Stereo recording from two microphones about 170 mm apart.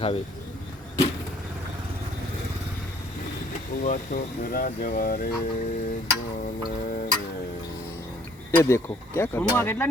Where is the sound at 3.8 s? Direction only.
55° left (ahead or behind).